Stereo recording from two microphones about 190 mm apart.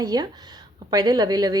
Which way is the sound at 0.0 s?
20° right (ahead or behind).